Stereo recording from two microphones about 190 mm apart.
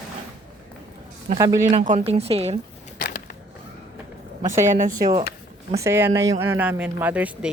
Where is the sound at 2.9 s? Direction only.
50° left (ahead or behind).